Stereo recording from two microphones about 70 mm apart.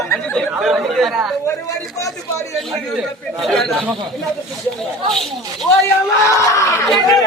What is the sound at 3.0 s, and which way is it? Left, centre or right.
Speech, centre.